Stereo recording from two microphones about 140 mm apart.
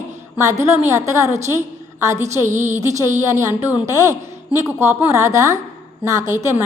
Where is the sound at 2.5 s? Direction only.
60° right (ahead or behind).